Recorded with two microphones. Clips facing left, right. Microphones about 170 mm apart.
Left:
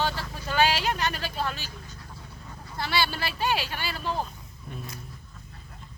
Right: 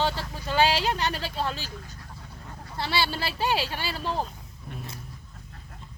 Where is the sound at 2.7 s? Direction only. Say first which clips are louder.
Even; 30° right (ahead or behind).